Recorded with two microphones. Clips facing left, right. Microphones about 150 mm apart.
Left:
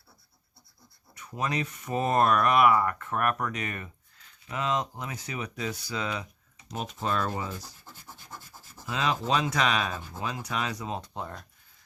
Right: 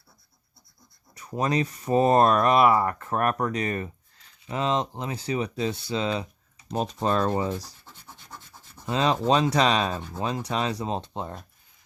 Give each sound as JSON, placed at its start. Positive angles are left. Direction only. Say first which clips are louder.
{"t": 1.1, "sound": "speech", "louder": "right 6 dB", "side_deg": -35}
{"t": 8.9, "sound": "speech", "louder": "right 5 dB", "side_deg": -35}